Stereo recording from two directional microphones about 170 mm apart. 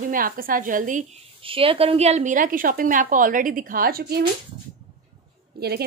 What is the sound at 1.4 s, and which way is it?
A woman's voice, 35° right (ahead or behind).